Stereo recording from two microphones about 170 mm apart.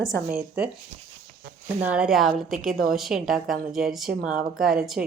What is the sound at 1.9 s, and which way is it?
Speech, 5° right (ahead or behind).